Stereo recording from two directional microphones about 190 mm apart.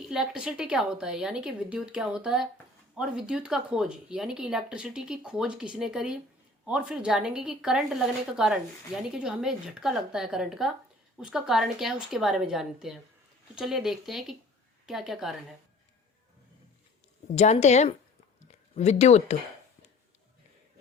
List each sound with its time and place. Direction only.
0.1 s speech: 5° right (ahead or behind)
17.3 s a woman's voice: 35° left (ahead or behind)